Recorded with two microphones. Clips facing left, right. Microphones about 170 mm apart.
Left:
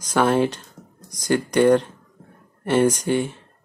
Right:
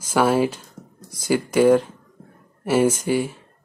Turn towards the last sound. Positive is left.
turn(degrees=-5)  # may be behind; listen again after turning